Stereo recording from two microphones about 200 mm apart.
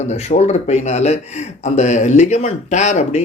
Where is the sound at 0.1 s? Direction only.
35° left (ahead or behind).